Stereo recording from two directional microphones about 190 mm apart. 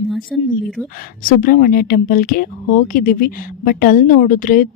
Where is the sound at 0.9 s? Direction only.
50° left (ahead or behind).